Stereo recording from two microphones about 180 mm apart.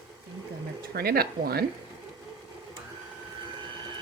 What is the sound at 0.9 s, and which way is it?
Speech, 60° right (ahead or behind).